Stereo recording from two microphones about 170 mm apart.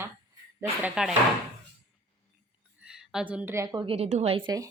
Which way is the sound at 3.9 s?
40° right (ahead or behind).